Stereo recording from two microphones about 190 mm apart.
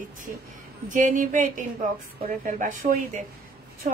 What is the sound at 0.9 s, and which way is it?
A woman's voice, 40° right (ahead or behind).